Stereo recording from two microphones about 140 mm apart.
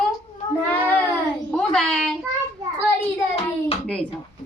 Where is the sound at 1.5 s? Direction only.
5° left (ahead or behind).